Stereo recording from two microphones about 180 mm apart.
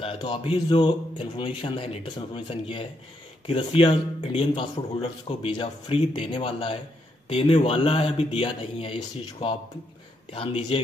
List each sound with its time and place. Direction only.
0.0 s speech: 30° left (ahead or behind)
10.3 s speech: 30° left (ahead or behind)